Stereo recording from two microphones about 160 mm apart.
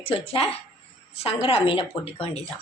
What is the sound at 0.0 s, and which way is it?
A woman's voice, 35° left (ahead or behind).